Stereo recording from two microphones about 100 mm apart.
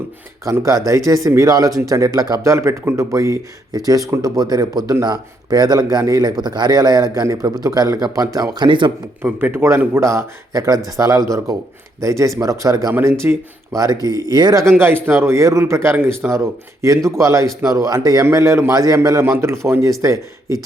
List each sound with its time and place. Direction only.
0.5 s speech: 35° right (ahead or behind)
9.2 s a man's voice: 20° right (ahead or behind); by 12.9 s 35° right (ahead or behind)
12.9 s a man's voice: 25° right (ahead or behind)
13.7 s speech: 35° right (ahead or behind)
14.7 s a man's voice: 20° right (ahead or behind)